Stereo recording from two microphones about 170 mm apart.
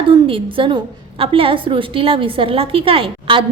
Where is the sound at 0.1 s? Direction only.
30° right (ahead or behind).